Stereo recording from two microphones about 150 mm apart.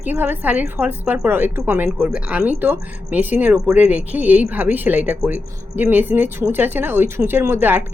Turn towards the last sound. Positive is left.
turn(degrees=-15)  # may be behind; listen again after turning